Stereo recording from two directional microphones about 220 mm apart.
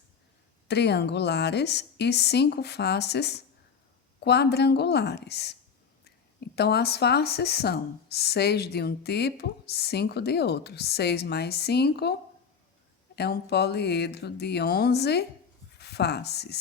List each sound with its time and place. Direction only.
0.7 s speech: 50° left (ahead or behind)
13.1 s speech: 50° left (ahead or behind)